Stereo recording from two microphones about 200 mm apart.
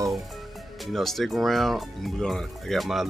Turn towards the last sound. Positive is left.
turn(degrees=0)  # may be behind; listen again after turning